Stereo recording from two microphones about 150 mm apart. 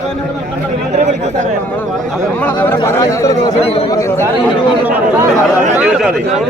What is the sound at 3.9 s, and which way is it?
Speech, 20° left (ahead or behind).